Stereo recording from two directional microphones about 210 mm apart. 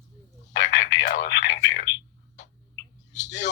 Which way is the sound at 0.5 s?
55° left (ahead or behind).